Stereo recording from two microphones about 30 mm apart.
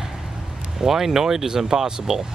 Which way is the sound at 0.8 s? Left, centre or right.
Centre.